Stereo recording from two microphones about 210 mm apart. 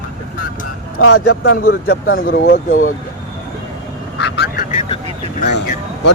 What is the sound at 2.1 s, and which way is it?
Speech, 45° left (ahead or behind).